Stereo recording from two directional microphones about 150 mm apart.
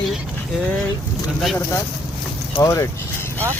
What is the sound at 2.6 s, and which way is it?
Speech, 20° left (ahead or behind).